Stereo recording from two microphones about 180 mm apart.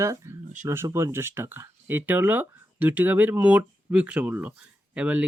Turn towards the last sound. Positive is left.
turn(degrees=-5)  # may be behind; listen again after turning